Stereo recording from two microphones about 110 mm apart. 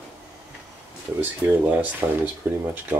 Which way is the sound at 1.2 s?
15° right (ahead or behind).